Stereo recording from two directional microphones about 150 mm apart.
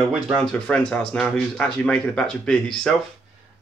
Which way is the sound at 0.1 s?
Centre (ahead or behind).